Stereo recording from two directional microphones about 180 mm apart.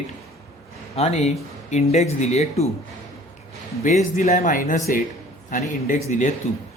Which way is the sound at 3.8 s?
45° left (ahead or behind).